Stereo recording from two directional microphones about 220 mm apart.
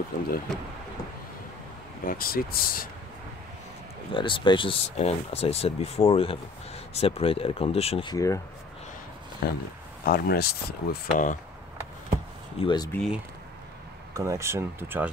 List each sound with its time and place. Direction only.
2.0 s speech: 40° left (ahead or behind)
4.1 s speech: 20° left (ahead or behind)
9.4 s speech: 45° left (ahead or behind)
12.5 s speech: 20° left (ahead or behind)
12.9 s speech: centre (ahead or behind)
14.1 s speech: 15° right (ahead or behind)